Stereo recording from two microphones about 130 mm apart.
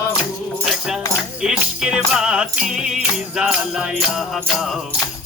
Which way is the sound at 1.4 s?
5° right (ahead or behind).